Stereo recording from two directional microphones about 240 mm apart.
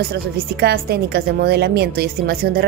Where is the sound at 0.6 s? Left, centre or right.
Right.